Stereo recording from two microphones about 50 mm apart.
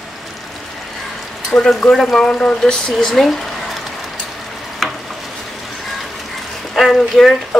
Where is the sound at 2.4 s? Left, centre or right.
Centre.